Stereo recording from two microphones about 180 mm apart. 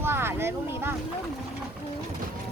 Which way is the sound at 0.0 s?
15° right (ahead or behind).